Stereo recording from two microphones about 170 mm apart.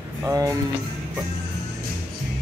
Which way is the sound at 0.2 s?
20° right (ahead or behind).